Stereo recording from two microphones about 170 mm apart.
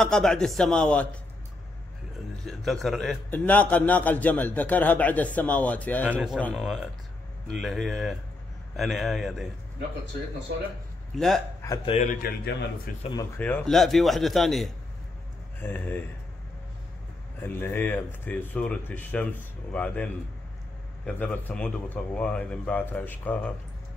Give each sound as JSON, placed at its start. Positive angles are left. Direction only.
{"t": 0.0, "sound": "a man's voice", "side_deg": 5}
{"t": 2.4, "sound": "a man's voice", "side_deg": 0}
{"t": 6.0, "sound": "speech", "side_deg": -10}
{"t": 6.3, "sound": "a man's voice", "side_deg": 5}
{"t": 11.1, "sound": "a man's voice", "side_deg": 0}
{"t": 11.8, "sound": "a man's voice", "side_deg": 35}
{"t": 12.1, "sound": "a man's voice", "side_deg": 60}
{"t": 13.4, "sound": "a man's voice", "side_deg": 10}
{"t": 13.7, "sound": "a man's voice", "side_deg": 0}
{"t": 17.4, "sound": "a man's voice", "side_deg": 10}